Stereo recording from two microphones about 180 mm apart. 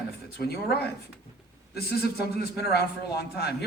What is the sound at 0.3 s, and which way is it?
Speech, 60° left (ahead or behind).